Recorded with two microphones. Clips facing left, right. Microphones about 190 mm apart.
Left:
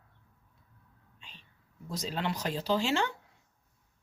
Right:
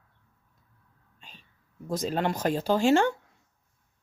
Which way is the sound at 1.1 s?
45° right (ahead or behind).